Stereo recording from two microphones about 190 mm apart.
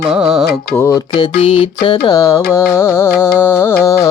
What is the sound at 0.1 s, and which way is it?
Music, 5° right (ahead or behind).